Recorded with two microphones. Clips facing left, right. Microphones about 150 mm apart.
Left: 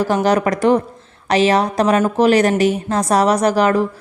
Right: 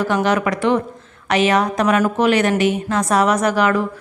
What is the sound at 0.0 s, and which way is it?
A woman's voice, 35° left (ahead or behind).